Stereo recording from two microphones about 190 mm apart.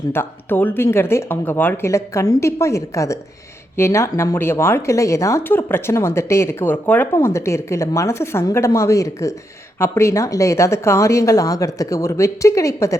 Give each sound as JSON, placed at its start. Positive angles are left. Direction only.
{"t": 0.1, "sound": "speech", "side_deg": 10}